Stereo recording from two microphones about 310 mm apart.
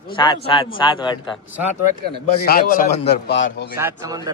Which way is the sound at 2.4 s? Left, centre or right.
Left.